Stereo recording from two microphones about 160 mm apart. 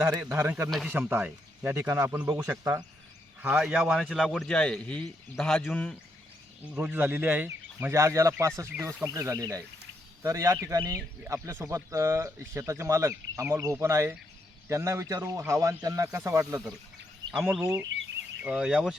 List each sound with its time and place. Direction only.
0.2 s speech: 15° right (ahead or behind); by 6.0 s 5° left (ahead or behind)
6.7 s speech: 10° right (ahead or behind)
17.6 s speech: 15° right (ahead or behind)